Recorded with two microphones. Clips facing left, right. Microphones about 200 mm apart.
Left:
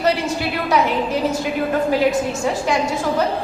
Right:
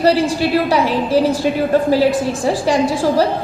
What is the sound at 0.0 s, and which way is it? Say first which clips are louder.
A woman's voice: right 6 dB; 35° right (ahead or behind).